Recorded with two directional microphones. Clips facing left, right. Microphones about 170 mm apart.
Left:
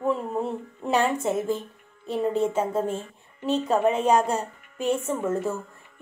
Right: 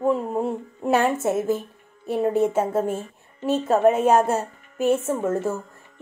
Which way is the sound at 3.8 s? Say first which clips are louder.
Right 5 dB; 50° right (ahead or behind).